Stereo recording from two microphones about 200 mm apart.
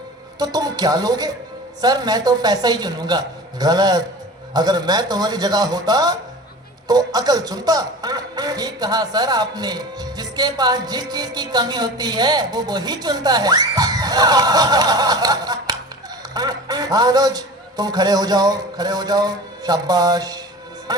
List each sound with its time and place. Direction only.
0.3 s a man's voice: 20° right (ahead or behind)